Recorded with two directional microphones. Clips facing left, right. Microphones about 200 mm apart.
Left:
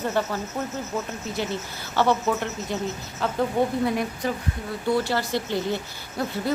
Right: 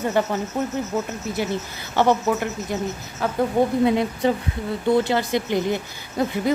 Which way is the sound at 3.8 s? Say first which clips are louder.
Right 6 dB; 25° right (ahead or behind).